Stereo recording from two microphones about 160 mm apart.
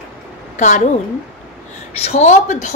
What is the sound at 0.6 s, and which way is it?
Speech, 50° left (ahead or behind).